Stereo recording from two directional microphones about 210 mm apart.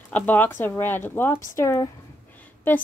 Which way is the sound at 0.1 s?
10° left (ahead or behind).